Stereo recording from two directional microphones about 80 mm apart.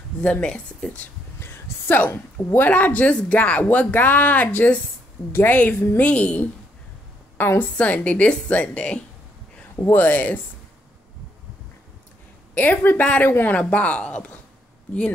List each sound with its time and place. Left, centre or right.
0.2 s a woman's voice: centre
1.4 s a woman's voice: left
12.5 s a woman's voice: left